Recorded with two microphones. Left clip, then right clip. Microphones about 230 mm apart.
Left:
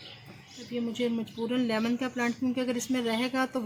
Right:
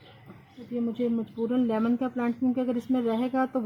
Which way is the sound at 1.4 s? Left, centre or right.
Centre.